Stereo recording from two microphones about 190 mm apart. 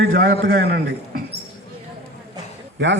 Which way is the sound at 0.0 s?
50° right (ahead or behind).